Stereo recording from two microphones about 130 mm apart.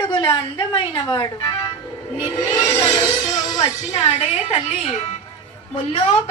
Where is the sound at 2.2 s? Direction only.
20° left (ahead or behind).